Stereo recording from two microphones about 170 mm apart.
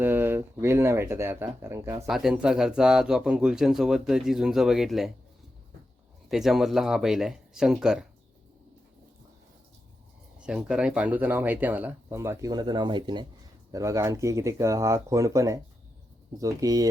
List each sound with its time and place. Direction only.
0.0 s speech: 10° right (ahead or behind)
2.0 s a man's voice: centre (ahead or behind)
6.2 s a man's voice: centre (ahead or behind)
10.3 s speech: 5° right (ahead or behind); by 16.9 s 20° right (ahead or behind)